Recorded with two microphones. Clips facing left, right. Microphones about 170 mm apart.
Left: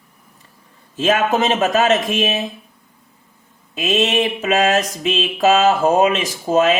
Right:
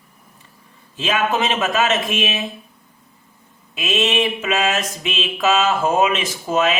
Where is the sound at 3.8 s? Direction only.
40° left (ahead or behind).